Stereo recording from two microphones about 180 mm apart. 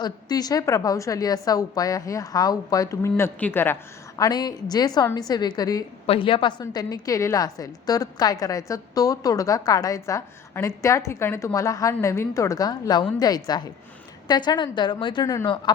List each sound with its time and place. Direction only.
0.0 s a woman's voice: 20° left (ahead or behind)
4.2 s a woman's voice: 20° left (ahead or behind)